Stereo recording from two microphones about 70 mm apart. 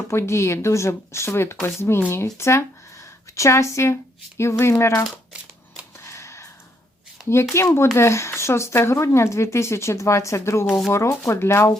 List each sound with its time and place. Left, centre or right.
0.1 s a woman's voice: left
6.0 s a sound: left
7.5 s a woman's voice: left